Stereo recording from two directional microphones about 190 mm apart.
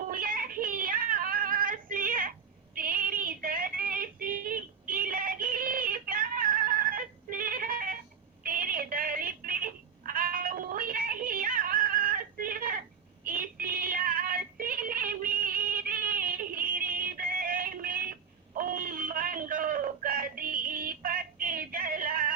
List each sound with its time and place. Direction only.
0.1 s a sound: 50° right (ahead or behind)
2.7 s female singing: 50° right (ahead or behind)
8.4 s telephone: 50° right (ahead or behind)
10.1 s music: 50° right (ahead or behind)
13.2 s female singing: 50° right (ahead or behind)
18.5 s a sound: 45° right (ahead or behind)